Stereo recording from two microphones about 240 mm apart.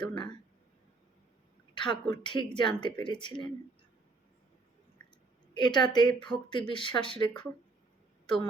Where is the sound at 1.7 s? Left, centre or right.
Centre.